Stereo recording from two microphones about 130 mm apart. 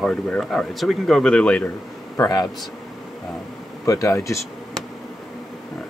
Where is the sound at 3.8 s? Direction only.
25° left (ahead or behind).